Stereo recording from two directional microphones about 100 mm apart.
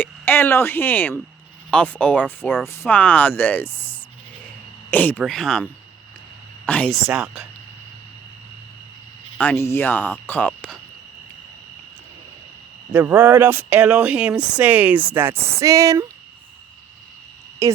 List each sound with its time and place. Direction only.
0.0 s speech: 20° left (ahead or behind)
5.2 s speech: 5° left (ahead or behind)
6.7 s speech: 15° left (ahead or behind)
6.9 s speech: 5° right (ahead or behind)
9.4 s speech: 20° left (ahead or behind)
12.9 s speech: 20° right (ahead or behind)
17.6 s speech: 35° right (ahead or behind)